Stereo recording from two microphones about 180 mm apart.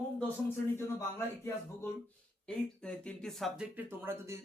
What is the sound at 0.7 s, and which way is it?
Speech, 15° left (ahead or behind).